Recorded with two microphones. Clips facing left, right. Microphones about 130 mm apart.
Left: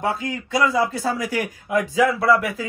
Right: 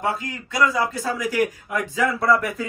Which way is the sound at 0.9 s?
30° left (ahead or behind).